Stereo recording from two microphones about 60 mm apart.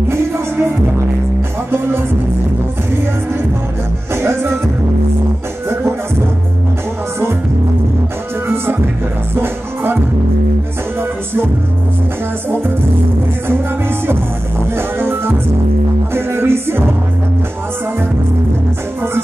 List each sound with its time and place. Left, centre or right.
4.1 s music: right
9.3 s music: right
13.5 s music: right